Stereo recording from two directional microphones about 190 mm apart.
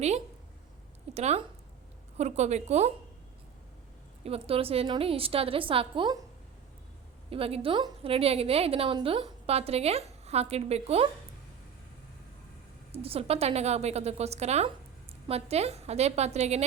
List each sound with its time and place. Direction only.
1.1 s a woman's voice: 35° right (ahead or behind)
4.2 s a woman's voice: 30° right (ahead or behind)
7.3 s a woman's voice: 30° right (ahead or behind)
12.9 s a woman's voice: 30° right (ahead or behind)